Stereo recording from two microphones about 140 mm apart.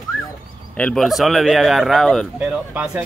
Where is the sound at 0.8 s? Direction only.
5° left (ahead or behind).